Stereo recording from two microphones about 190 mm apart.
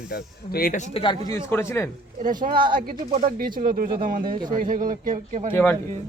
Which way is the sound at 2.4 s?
45° right (ahead or behind).